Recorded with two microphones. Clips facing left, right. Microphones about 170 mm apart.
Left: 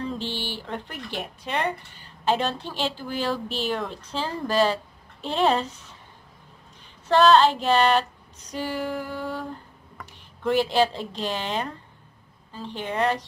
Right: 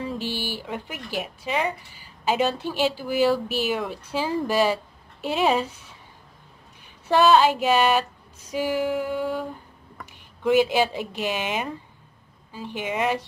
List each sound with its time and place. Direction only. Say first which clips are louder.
0.0 s speech: right 1 dB; 10° right (ahead or behind)
5.2 s female singing: even; 5° right (ahead or behind)
7.1 s speech: even; 10° right (ahead or behind)
8.5 s female singing: right 5 dB; 5° right (ahead or behind)
10.8 s speech: left 1 dB; 10° right (ahead or behind)